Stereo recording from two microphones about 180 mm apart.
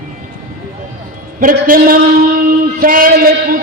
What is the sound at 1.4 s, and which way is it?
A man's voice, 50° right (ahead or behind).